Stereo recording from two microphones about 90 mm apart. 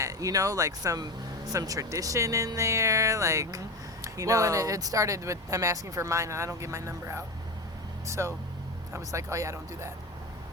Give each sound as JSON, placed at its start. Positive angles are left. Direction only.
{"t": 0.0, "sound": "speech", "side_deg": -40}